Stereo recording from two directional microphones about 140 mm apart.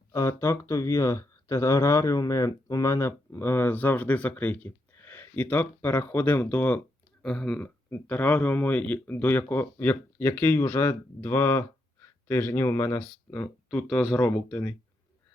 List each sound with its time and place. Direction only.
0.1 s speech: 20° left (ahead or behind); by 14.3 s 5° left (ahead or behind)
14.3 s speech: 15° left (ahead or behind)